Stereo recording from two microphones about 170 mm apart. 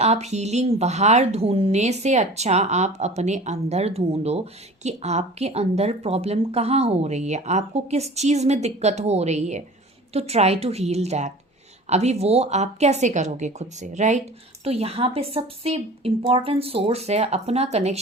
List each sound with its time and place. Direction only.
0.0 s speech: 40° right (ahead or behind)